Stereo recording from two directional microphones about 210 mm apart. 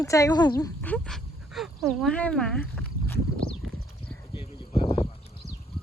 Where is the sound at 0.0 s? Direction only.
15° left (ahead or behind).